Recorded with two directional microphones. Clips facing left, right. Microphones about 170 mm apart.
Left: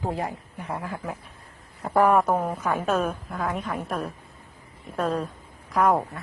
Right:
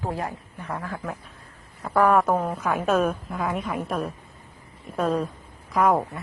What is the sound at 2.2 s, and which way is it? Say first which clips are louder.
A woman's voice: right 1 dB; 10° left (ahead or behind).